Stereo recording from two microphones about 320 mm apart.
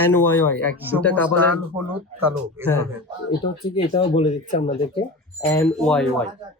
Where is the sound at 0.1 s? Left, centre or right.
Centre.